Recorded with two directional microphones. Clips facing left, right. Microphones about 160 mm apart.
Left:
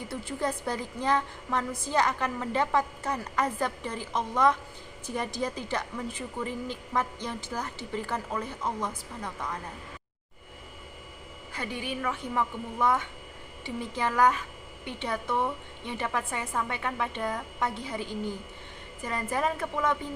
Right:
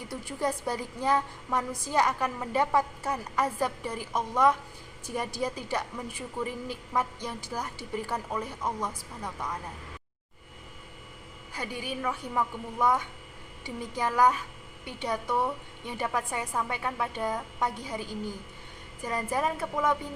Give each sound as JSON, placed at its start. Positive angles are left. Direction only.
{"t": 0.1, "sound": "a woman's voice", "side_deg": -10}
{"t": 11.7, "sound": "a woman's voice", "side_deg": -40}
{"t": 12.0, "sound": "a woman's voice", "side_deg": -10}
{"t": 14.0, "sound": "a woman's voice", "side_deg": -10}
{"t": 19.0, "sound": "a woman's voice", "side_deg": -10}